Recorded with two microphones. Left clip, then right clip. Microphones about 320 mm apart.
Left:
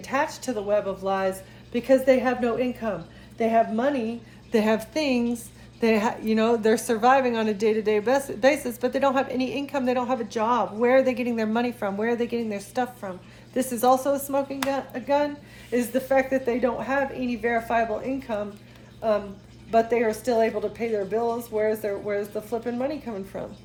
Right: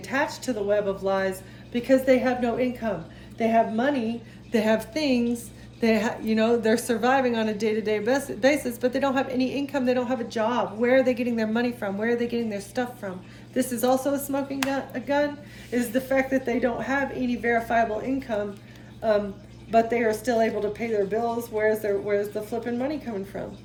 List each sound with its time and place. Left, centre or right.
0.0 s a woman's voice: centre
19.7 s a woman's voice: centre